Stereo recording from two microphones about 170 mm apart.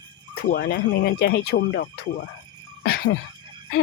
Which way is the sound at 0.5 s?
60° left (ahead or behind).